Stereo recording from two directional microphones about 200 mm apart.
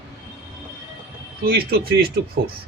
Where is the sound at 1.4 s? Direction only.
50° right (ahead or behind).